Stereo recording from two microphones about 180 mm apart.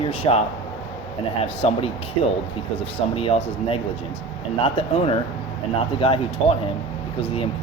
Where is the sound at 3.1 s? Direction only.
30° left (ahead or behind).